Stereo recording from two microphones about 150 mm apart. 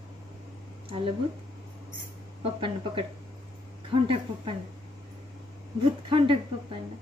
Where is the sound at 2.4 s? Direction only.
35° right (ahead or behind).